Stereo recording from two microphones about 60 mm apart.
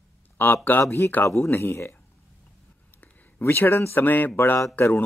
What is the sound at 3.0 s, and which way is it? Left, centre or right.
Speech, left.